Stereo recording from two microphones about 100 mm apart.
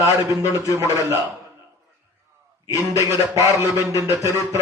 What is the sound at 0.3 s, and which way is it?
Speech, 30° right (ahead or behind).